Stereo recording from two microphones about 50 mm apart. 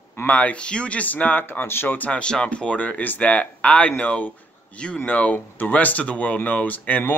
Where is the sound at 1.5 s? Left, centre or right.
Left.